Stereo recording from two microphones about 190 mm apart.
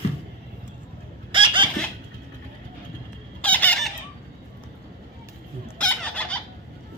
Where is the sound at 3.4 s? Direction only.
5° left (ahead or behind).